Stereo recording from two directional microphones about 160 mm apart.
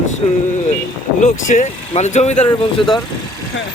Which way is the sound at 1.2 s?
50° left (ahead or behind).